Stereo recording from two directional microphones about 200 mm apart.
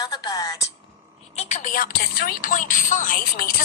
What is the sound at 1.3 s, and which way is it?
Speech, 35° left (ahead or behind).